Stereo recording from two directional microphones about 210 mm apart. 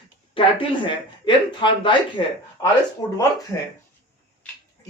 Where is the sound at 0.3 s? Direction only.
25° left (ahead or behind).